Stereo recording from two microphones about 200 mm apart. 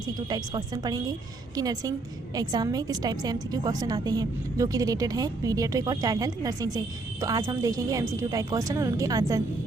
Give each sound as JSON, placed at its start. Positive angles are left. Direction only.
{"t": 0.3, "sound": "a woman's voice", "side_deg": -20}